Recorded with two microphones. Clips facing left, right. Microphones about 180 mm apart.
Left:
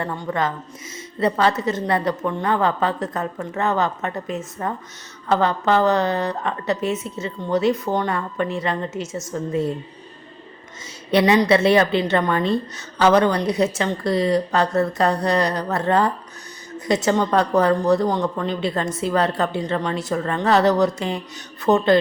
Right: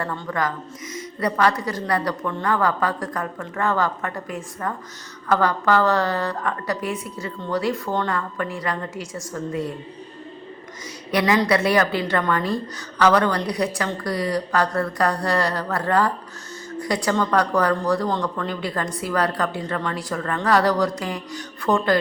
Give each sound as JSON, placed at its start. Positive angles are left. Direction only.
{"t": 0.0, "sound": "a woman's voice", "side_deg": 20}
{"t": 11.1, "sound": "a woman's voice", "side_deg": 25}